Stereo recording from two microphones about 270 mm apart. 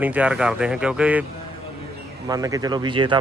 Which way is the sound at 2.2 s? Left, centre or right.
Centre.